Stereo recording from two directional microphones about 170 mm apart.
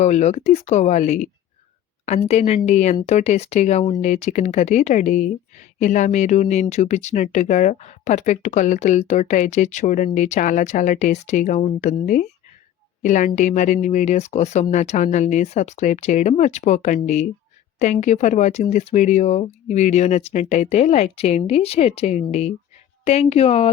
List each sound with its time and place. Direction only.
0.0 s speech: 40° left (ahead or behind)